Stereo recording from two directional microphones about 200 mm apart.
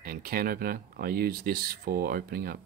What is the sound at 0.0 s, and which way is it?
Speech, 45° right (ahead or behind).